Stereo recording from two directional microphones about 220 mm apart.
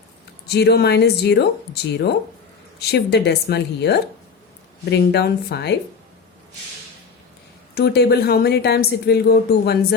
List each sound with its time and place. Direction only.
0.4 s speech: 45° left (ahead or behind)
7.8 s speech: 45° left (ahead or behind)